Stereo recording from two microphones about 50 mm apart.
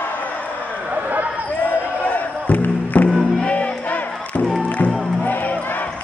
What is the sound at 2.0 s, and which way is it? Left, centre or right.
Music, left.